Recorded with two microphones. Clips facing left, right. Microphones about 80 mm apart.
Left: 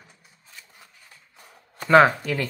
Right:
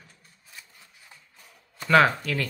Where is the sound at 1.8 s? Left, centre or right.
Centre.